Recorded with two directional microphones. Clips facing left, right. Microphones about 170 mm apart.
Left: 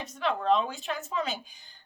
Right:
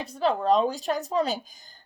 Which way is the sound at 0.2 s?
35° right (ahead or behind).